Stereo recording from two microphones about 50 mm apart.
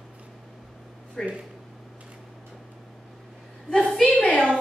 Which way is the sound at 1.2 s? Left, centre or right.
Centre.